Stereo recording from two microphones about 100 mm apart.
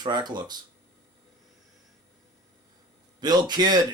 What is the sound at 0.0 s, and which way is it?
Speech, 45° right (ahead or behind).